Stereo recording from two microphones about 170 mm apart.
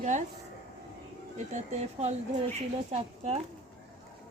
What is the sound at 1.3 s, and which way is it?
Speech, 45° right (ahead or behind).